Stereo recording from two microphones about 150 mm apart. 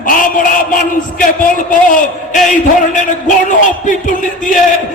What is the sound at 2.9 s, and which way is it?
A man's voice, 55° left (ahead or behind).